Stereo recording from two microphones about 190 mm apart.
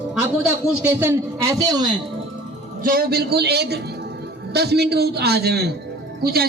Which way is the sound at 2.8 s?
50° right (ahead or behind).